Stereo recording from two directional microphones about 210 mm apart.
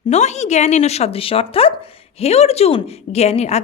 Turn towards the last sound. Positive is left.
turn(degrees=30)  # may be behind; listen again after turning